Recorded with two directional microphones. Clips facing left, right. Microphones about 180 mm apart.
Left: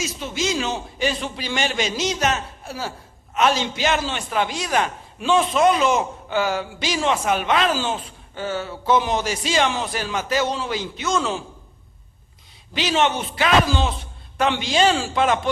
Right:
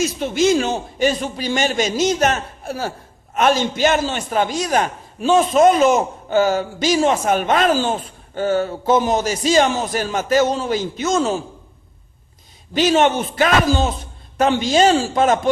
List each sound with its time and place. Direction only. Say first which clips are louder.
0.0 s a man's voice: right 9 dB; 55° right (ahead or behind)
12.7 s a man's voice: right 6 dB; 45° right (ahead or behind)